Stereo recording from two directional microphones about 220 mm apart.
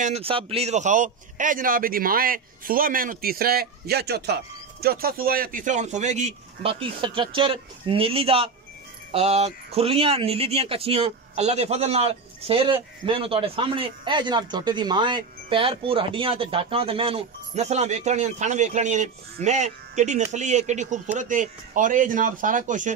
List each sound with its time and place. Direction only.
0.0 s a man's voice: 25° right (ahead or behind)